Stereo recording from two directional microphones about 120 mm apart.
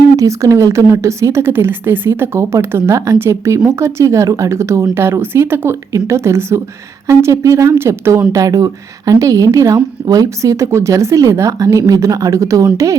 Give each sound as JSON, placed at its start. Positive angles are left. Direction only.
{"t": 0.2, "sound": "a woman's voice", "side_deg": -25}